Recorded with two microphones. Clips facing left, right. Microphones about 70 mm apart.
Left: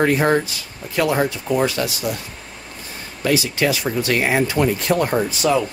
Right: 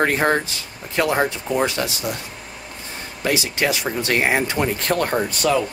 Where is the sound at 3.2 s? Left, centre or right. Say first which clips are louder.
Left 2 dB; right.